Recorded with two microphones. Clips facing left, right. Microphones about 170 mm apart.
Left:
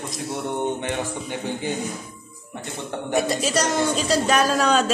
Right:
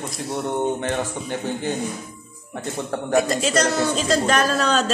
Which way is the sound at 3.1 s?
10° left (ahead or behind).